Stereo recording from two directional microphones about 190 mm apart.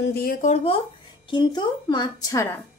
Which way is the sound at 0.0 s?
55° left (ahead or behind).